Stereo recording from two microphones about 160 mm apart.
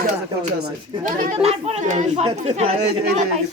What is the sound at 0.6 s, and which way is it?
Speech, 55° right (ahead or behind).